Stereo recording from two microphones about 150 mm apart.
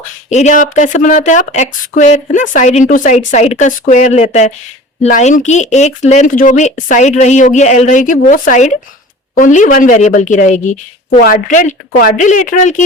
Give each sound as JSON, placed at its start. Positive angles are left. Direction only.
{"t": 0.3, "sound": "a woman's voice", "side_deg": 50}
{"t": 11.2, "sound": "a woman's voice", "side_deg": 65}